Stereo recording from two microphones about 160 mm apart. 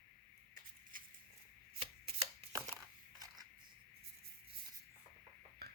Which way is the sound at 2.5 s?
25° right (ahead or behind).